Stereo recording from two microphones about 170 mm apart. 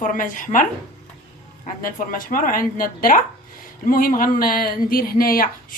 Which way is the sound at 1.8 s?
55° left (ahead or behind).